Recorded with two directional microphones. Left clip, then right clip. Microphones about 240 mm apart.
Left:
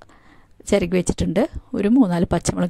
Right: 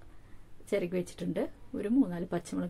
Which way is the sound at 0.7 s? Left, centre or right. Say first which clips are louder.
Left 13 dB; left.